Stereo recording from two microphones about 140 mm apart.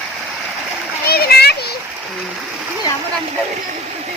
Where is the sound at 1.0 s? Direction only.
90° left.